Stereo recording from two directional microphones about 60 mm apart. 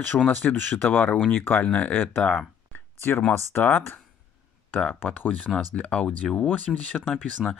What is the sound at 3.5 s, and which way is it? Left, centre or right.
Speech, left.